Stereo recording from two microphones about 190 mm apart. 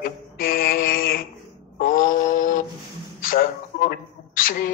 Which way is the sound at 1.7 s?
45° left (ahead or behind).